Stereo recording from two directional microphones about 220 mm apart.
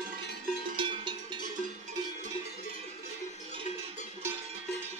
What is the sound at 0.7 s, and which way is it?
Music, 20° right (ahead or behind).